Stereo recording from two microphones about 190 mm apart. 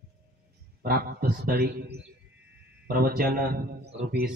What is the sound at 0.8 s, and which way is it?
A man's voice, 50° right (ahead or behind).